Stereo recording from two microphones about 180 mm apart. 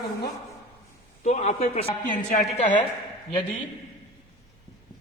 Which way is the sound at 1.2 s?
40° left (ahead or behind).